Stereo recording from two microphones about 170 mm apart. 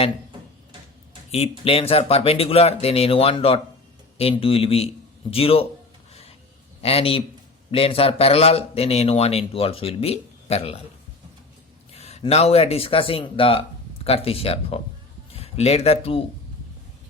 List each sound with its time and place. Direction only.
1.3 s a man's voice: 35° left (ahead or behind)
6.8 s a man's voice: 35° left (ahead or behind)
11.9 s a man's voice: 40° left (ahead or behind)